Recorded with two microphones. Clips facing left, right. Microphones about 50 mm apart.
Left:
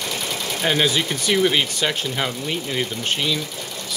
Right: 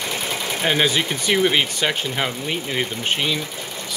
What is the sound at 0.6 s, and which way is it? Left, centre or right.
Speech, centre.